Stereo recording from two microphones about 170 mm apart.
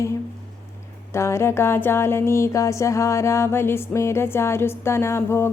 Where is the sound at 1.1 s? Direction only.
15° left (ahead or behind).